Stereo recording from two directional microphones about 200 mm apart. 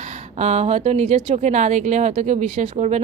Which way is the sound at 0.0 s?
35° right (ahead or behind).